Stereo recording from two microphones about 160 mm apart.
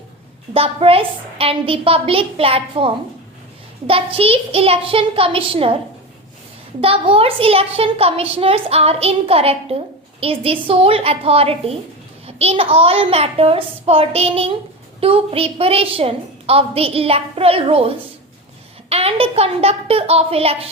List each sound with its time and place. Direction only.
0.5 s a woman's voice: 35° right (ahead or behind)
6.8 s a woman's voice: 35° right (ahead or behind)